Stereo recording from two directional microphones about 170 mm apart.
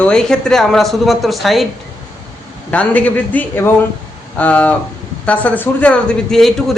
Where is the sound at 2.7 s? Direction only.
10° left (ahead or behind).